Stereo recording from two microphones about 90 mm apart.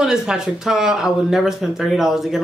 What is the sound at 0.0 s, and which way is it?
Speech, 5° right (ahead or behind).